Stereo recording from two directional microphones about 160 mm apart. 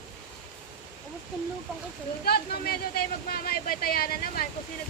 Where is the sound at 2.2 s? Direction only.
75° left (ahead or behind).